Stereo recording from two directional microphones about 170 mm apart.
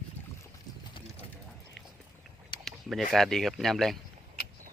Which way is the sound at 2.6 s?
Centre (ahead or behind).